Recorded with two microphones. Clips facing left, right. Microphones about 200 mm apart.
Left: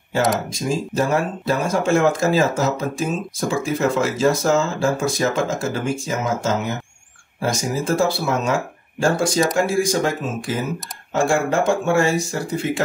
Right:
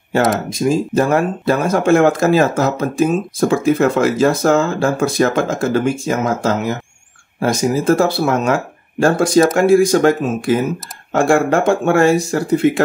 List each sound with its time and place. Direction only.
0.5 s speech: 60° right (ahead or behind)